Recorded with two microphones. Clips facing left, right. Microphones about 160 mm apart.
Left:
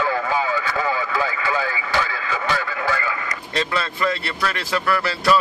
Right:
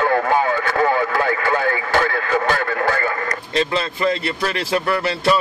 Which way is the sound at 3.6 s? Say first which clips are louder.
Right 3 dB; 25° right (ahead or behind).